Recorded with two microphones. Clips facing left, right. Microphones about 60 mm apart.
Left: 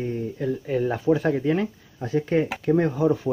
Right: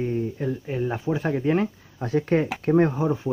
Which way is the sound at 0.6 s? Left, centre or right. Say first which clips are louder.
Left 7 dB; centre.